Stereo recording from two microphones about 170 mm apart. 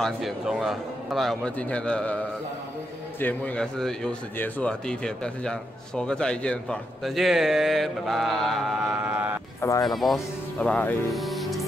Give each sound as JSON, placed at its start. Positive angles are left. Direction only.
{"t": 0.0, "sound": "a man's voice", "side_deg": 0}
{"t": 3.2, "sound": "a man's voice", "side_deg": 10}
{"t": 9.6, "sound": "speech", "side_deg": 20}
{"t": 9.8, "sound": "a man's voice", "side_deg": 0}